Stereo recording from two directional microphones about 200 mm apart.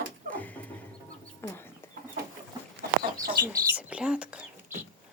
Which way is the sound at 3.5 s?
15° right (ahead or behind).